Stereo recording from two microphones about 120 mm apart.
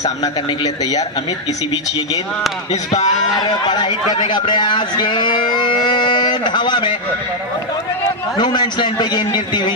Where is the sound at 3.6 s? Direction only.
40° left (ahead or behind).